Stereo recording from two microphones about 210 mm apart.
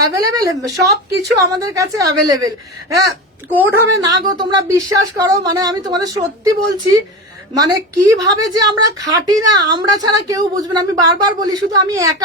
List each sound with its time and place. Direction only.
0.1 s a woman's voice: 15° right (ahead or behind)
3.5 s a woman's voice: 10° right (ahead or behind)
7.5 s a woman's voice: 15° right (ahead or behind)